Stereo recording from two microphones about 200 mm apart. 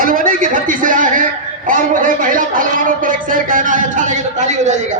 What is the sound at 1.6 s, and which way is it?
Speech, 40° right (ahead or behind).